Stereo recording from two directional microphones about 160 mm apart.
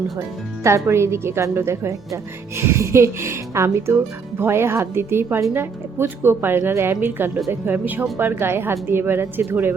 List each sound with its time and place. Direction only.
0.6 s a woman's voice: 15° right (ahead or behind)